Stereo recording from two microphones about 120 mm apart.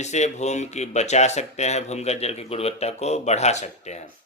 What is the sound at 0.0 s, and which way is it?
Speech, 70° left (ahead or behind).